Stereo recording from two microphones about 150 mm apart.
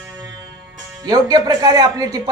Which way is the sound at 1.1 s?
25° right (ahead or behind).